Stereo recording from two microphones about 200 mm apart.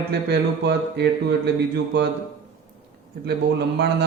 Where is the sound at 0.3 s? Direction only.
55° right (ahead or behind).